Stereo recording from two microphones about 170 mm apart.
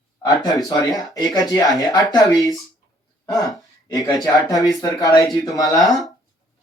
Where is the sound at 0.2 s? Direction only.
20° left (ahead or behind).